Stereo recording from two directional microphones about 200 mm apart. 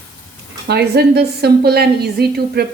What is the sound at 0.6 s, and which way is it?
A woman's voice, 55° right (ahead or behind).